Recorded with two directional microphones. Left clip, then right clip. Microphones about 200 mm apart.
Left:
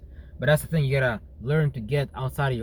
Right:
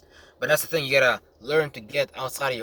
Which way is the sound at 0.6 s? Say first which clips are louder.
Right 6 dB; 25° right (ahead or behind).